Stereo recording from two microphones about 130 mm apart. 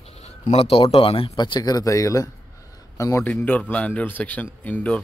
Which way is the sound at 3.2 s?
10° left (ahead or behind).